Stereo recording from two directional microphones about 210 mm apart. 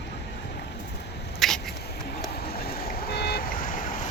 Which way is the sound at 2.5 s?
50° left (ahead or behind).